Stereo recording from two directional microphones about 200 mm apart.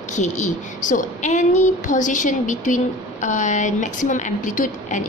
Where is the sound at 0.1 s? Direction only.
35° left (ahead or behind).